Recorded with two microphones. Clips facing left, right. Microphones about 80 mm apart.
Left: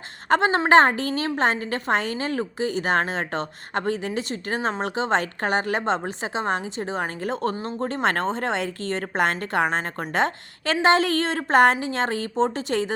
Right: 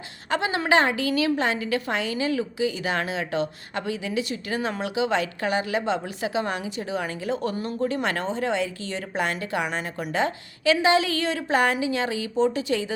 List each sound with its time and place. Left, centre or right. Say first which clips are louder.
0.3 s a woman's voice: left 5 dB; left
6.1 s a woman's voice: left 1 dB; left
7.5 s speech: right 1 dB; left
8.0 s a woman's voice: left 3 dB; left
9.6 s a woman's voice: left 4 dB; left
10.1 s a woman's voice: left 2 dB; left